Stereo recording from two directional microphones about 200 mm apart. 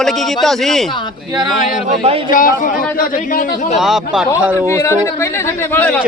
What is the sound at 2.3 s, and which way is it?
A man's voice, 40° left (ahead or behind).